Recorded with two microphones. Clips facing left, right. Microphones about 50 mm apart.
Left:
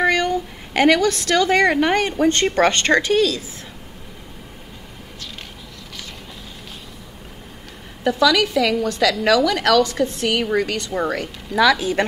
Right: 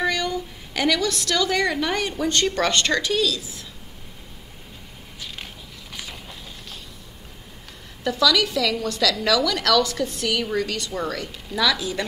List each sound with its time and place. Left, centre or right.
0.0 s a woman's voice: left
8.0 s a woman's voice: left